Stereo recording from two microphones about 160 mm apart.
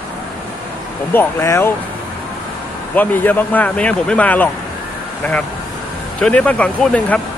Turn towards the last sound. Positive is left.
turn(degrees=10)  # may be behind; listen again after turning